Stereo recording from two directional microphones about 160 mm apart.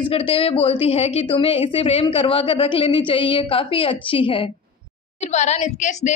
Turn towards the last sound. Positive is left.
turn(degrees=45)  # may be behind; listen again after turning